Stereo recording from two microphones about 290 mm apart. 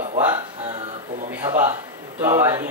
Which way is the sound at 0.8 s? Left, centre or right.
Right.